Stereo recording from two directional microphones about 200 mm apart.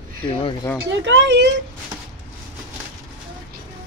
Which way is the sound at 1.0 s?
65° right (ahead or behind).